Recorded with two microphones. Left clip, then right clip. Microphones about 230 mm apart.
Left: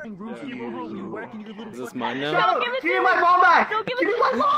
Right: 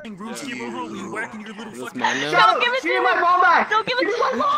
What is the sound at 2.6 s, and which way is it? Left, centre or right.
Speech, right.